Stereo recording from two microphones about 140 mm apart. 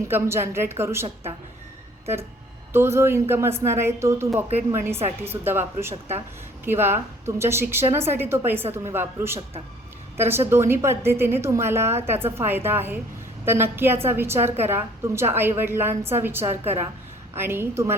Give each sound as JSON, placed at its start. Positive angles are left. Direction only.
{"t": 0.1, "sound": "a woman's voice", "side_deg": -15}
{"t": 2.7, "sound": "a woman's voice", "side_deg": -20}